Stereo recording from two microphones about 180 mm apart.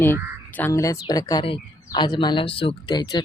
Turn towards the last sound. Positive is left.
turn(degrees=25)  # may be behind; listen again after turning